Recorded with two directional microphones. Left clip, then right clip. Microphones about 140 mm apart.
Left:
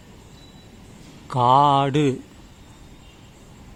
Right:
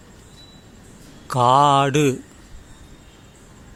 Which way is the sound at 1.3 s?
20° right (ahead or behind).